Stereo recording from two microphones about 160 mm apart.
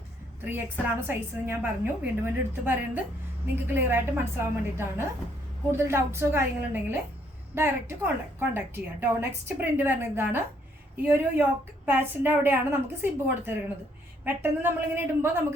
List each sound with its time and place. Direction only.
0.4 s a woman's voice: 10° right (ahead or behind)
7.5 s a woman's voice: 15° right (ahead or behind)